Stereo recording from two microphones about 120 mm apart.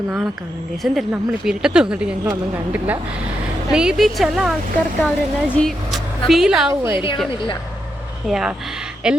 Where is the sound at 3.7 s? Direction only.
5° right (ahead or behind).